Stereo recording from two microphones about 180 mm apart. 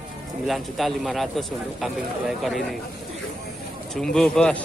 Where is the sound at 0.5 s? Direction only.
Centre (ahead or behind).